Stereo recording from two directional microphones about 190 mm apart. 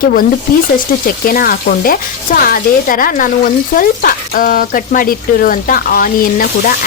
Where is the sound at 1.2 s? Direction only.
50° left (ahead or behind).